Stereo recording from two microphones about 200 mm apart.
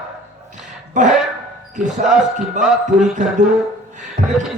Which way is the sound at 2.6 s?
35° right (ahead or behind).